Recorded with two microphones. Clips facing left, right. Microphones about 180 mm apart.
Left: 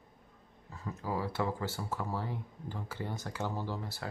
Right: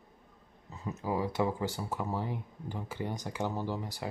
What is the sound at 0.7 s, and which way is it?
Speech, 20° right (ahead or behind).